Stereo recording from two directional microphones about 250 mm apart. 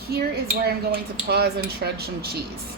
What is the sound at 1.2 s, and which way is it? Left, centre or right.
Cutlery, right.